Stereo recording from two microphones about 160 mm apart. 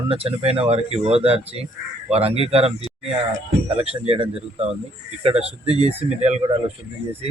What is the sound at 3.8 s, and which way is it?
Speech, 40° right (ahead or behind).